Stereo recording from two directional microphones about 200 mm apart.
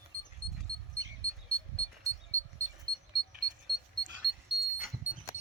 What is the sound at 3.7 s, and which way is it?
Alarm clock, 20° right (ahead or behind).